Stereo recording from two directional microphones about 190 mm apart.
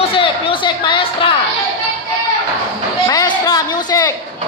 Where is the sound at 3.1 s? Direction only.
20° left (ahead or behind).